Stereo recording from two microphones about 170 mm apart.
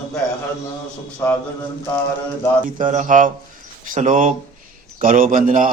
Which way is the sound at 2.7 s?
50° right (ahead or behind).